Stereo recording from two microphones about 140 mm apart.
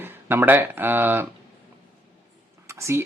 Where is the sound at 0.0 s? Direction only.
15° right (ahead or behind).